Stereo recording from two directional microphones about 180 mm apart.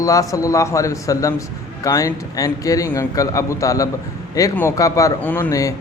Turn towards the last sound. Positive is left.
turn(degrees=15)  # may be behind; listen again after turning